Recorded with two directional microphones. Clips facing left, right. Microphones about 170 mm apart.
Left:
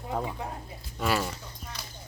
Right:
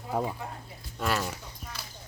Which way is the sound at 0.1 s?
10° right (ahead or behind).